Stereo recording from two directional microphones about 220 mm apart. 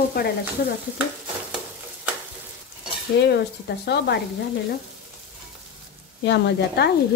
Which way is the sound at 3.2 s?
50° left (ahead or behind).